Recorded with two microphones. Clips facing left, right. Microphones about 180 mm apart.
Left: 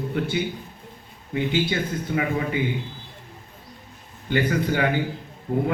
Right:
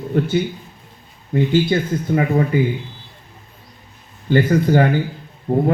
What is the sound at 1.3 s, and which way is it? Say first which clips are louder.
Speech: right 7 dB; 45° right (ahead or behind).